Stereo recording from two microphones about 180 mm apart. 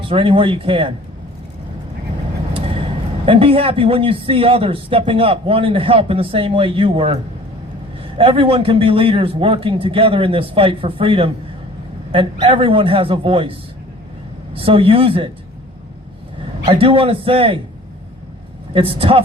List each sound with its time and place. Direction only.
0.0 s speech: 30° right (ahead or behind)
3.2 s a man's voice: 30° right (ahead or behind)
8.2 s a man's voice: 30° right (ahead or behind)
14.5 s a man's voice: 30° right (ahead or behind)
16.6 s a man's voice: 30° right (ahead or behind)
18.7 s a man's voice: 30° right (ahead or behind)